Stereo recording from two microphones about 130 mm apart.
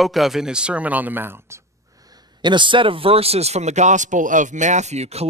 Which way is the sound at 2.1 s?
35° right (ahead or behind).